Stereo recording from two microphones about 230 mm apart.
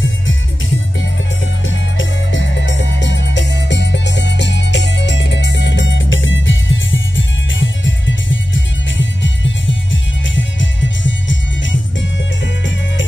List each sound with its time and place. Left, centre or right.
0.0 s music: left